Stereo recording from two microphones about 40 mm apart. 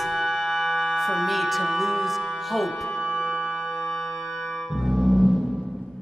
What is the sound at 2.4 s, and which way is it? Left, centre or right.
Speech, centre.